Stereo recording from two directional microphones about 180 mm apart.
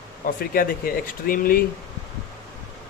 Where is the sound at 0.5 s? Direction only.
55° left (ahead or behind).